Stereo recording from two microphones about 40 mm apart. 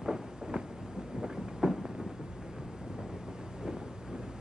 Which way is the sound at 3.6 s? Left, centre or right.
Centre.